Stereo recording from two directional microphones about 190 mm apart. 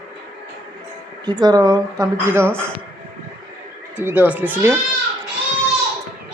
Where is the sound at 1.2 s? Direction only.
20° right (ahead or behind).